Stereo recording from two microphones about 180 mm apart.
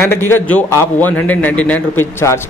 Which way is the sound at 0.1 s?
10° left (ahead or behind).